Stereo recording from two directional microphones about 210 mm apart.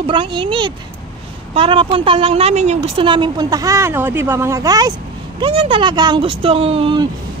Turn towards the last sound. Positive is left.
turn(degrees=-25)  # may be behind; listen again after turning